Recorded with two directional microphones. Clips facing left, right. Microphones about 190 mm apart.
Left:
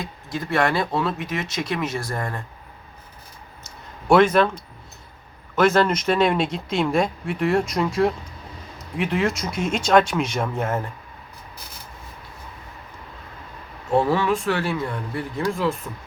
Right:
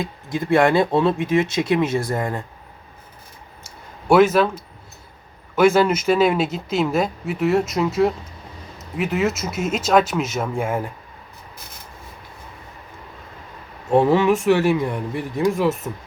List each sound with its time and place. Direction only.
0.0 s speech: 25° right (ahead or behind)
4.0 s speech: 5° right (ahead or behind)
5.5 s speech: 10° right (ahead or behind)
13.9 s speech: 20° right (ahead or behind)